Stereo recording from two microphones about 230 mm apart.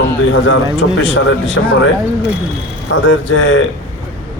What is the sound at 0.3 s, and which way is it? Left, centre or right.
Speech, left.